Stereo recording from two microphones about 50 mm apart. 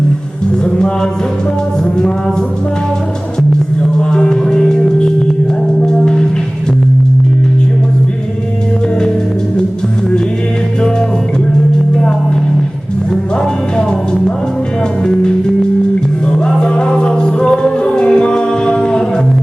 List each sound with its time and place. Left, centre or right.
4.1 s music: centre
13.7 s music: centre
16.6 s music: centre